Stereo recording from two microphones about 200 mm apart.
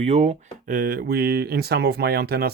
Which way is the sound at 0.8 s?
50° right (ahead or behind).